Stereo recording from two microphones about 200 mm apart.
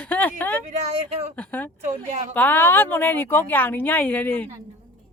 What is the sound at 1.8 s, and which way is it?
Speech, 35° right (ahead or behind).